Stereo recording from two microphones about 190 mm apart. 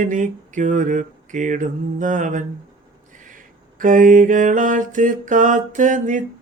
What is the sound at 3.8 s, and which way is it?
Mantra, 45° right (ahead or behind).